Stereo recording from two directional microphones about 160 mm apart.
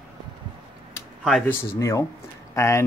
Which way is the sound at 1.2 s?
Centre (ahead or behind).